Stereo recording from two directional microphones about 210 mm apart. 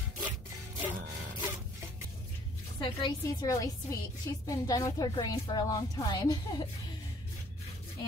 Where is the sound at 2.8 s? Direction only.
20° left (ahead or behind).